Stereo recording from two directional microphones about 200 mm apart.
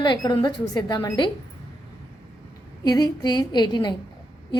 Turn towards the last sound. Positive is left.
turn(degrees=20)  # may be behind; listen again after turning